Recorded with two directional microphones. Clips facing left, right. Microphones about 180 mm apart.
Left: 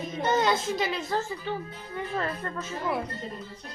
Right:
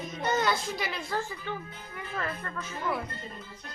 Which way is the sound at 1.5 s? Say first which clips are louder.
Left 5 dB; 35° left (ahead or behind).